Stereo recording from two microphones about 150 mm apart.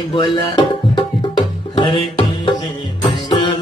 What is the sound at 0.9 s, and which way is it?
Music, 35° left (ahead or behind).